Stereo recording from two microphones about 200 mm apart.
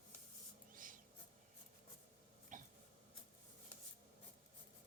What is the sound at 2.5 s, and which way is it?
Throat clearing, 40° right (ahead or behind).